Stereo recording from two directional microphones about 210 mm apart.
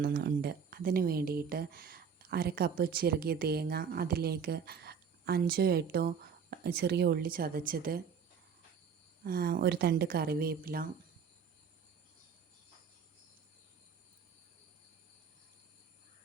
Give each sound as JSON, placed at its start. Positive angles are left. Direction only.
{"t": 0.0, "sound": "speech", "side_deg": -45}
{"t": 9.2, "sound": "speech", "side_deg": -45}